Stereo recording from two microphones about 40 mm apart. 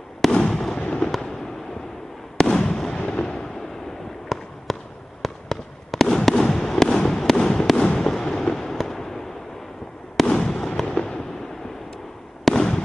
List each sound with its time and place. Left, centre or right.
0.5 s fireworks: centre
0.8 s fireworks: left
2.3 s fireworks: centre
4.3 s basketball bounce: centre
4.7 s fireworks: centre
6.2 s fireworks: centre
12.5 s fireworks: centre